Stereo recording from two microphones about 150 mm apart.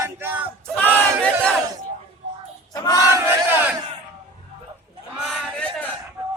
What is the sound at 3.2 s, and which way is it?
Battle cry, 15° right (ahead or behind).